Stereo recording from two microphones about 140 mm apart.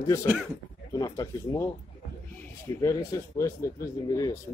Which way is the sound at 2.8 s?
20° left (ahead or behind).